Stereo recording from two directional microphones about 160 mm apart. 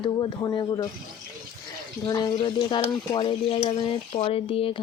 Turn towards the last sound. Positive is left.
turn(degrees=35)  # may be behind; listen again after turning